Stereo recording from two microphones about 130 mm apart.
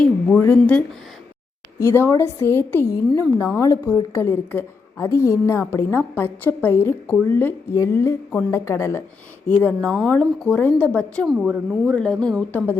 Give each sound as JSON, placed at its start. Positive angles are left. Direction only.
{"t": 0.0, "sound": "a woman's voice", "side_deg": 10}
{"t": 9.6, "sound": "a woman's voice", "side_deg": 5}
{"t": 11.3, "sound": "a woman's voice", "side_deg": -5}
{"t": 11.7, "sound": "a woman's voice", "side_deg": 5}